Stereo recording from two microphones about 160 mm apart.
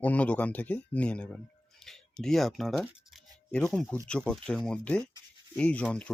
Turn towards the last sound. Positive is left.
turn(degrees=10)  # may be behind; listen again after turning